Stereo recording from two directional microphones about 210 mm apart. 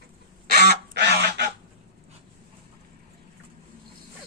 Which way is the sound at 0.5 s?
50° right (ahead or behind).